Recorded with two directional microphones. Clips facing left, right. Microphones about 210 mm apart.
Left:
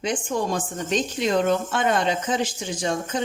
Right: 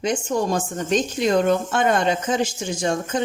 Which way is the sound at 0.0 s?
45° right (ahead or behind).